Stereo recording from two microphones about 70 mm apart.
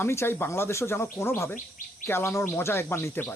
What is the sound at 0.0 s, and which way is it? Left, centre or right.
Speech, left.